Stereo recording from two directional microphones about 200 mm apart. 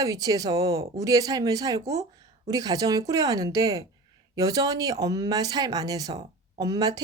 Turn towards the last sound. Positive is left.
turn(degrees=-20)  # may be behind; listen again after turning